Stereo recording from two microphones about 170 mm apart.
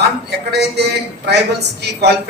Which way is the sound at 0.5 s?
75° right (ahead or behind).